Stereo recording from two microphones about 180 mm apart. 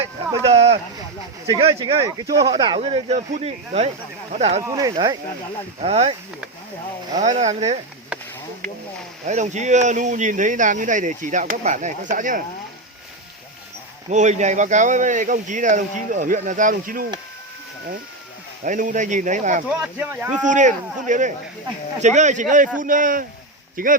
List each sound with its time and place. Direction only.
0.4 s a sound: 35° right (ahead or behind)
1.5 s speech: 30° right (ahead or behind)
4.6 s speech: 20° right (ahead or behind)
5.8 s speech: 35° right (ahead or behind)
7.2 s speech: 40° right (ahead or behind)
9.2 s speech: 40° right (ahead or behind)
14.1 s speech: 40° right (ahead or behind)
18.6 s speech: 45° right (ahead or behind)
19.8 s speech: 10° right (ahead or behind)
20.3 s speech: 45° right (ahead or behind)